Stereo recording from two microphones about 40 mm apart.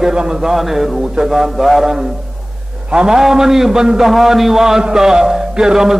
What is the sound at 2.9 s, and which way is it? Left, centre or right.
A man's voice, centre.